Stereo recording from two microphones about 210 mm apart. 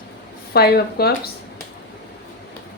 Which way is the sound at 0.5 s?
50° left (ahead or behind).